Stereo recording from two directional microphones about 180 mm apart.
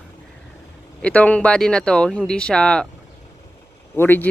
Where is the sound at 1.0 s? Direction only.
10° left (ahead or behind).